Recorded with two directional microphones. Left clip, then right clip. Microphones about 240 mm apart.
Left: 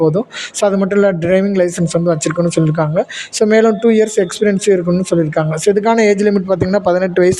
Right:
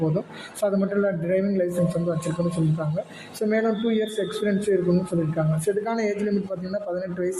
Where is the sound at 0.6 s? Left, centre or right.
Left.